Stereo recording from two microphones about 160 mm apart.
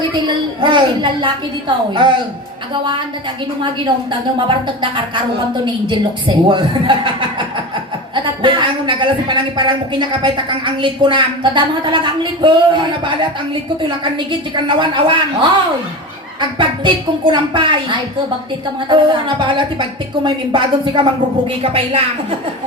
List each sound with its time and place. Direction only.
0.3 s a woman's voice: 30° right (ahead or behind)
4.1 s a man's voice: 30° right (ahead or behind)